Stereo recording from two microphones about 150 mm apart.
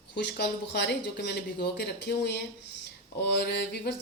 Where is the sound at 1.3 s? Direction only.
90° left.